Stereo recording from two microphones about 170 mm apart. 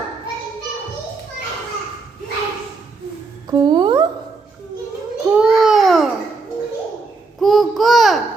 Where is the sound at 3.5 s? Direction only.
25° right (ahead or behind).